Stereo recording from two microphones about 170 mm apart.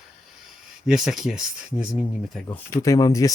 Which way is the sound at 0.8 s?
Centre (ahead or behind).